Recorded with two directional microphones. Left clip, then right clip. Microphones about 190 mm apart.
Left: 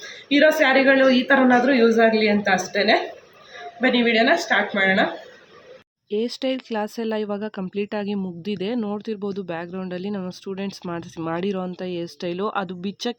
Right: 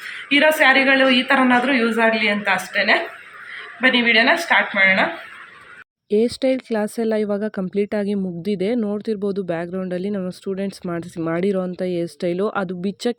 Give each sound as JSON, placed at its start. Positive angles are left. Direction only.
{"t": 0.4, "sound": "a woman's voice", "side_deg": 5}
{"t": 6.1, "sound": "speech", "side_deg": -20}